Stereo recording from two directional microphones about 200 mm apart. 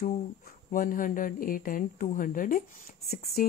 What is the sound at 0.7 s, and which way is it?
Speech, 45° left (ahead or behind).